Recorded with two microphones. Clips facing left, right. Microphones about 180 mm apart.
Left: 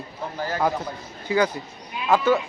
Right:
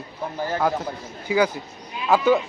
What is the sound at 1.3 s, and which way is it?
Speech, 10° right (ahead or behind).